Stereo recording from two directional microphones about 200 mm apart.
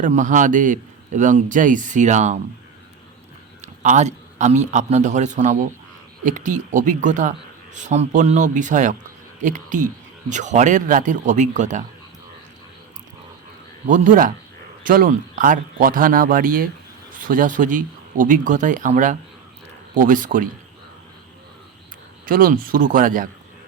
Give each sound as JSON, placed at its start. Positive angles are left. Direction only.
{"t": 0.0, "sound": "a man's voice", "side_deg": -40}
{"t": 3.6, "sound": "a man's voice", "side_deg": -35}
{"t": 13.8, "sound": "a man's voice", "side_deg": -40}
{"t": 22.3, "sound": "speech", "side_deg": -45}